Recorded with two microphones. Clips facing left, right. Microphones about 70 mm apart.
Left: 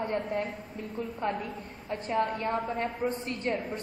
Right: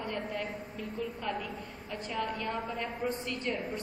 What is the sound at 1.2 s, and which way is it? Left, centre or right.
A woman's voice, left.